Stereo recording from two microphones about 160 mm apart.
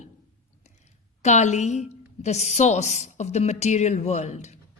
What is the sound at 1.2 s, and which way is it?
A woman's voice, 50° left (ahead or behind).